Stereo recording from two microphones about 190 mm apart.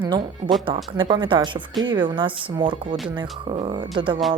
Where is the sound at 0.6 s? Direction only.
25° right (ahead or behind).